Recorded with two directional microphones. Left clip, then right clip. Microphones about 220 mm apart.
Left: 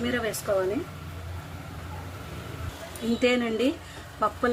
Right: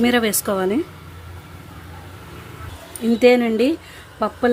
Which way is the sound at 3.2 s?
30° right (ahead or behind).